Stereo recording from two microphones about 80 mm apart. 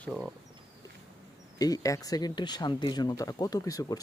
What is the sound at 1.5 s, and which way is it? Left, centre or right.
Speech, left.